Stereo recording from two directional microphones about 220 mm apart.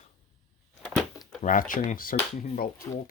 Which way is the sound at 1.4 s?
40° left (ahead or behind).